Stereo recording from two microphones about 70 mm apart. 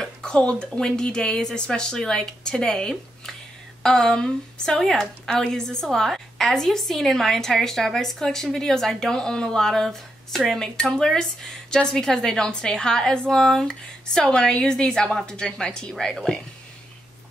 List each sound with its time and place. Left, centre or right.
0.0 s speech: centre